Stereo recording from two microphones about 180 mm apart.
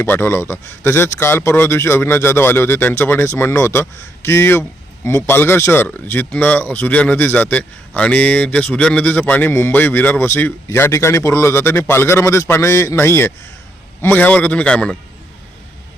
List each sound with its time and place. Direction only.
0.0 s speech: 15° left (ahead or behind)